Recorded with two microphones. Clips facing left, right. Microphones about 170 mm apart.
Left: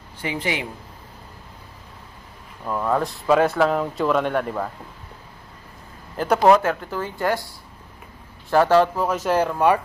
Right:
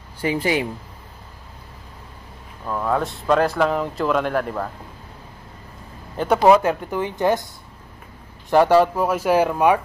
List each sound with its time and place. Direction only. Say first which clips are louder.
0.2 s speech: right 5 dB; 35° right (ahead or behind)
2.6 s speech: even; 5° left (ahead or behind)
6.1 s speech: right 1 dB; 5° left (ahead or behind)
6.7 s speech: right 3 dB; 15° right (ahead or behind)
8.5 s speech: right 2 dB; 15° right (ahead or behind)